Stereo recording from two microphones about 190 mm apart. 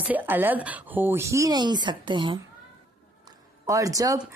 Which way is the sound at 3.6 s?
20° right (ahead or behind).